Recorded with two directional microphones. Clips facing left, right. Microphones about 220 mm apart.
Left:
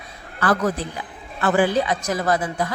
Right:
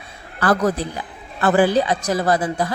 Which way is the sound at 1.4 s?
35° right (ahead or behind).